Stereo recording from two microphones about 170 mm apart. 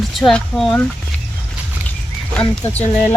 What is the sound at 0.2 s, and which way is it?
Speech, 5° left (ahead or behind).